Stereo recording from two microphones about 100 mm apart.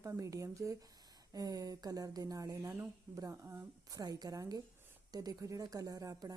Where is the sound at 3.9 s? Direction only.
40° right (ahead or behind).